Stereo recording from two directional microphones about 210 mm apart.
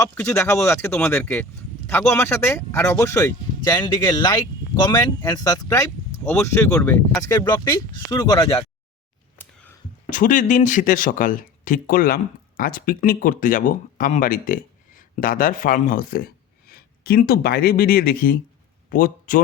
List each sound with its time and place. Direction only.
0.0 s speech: 10° left (ahead or behind)
10.1 s a man's voice: 40° left (ahead or behind)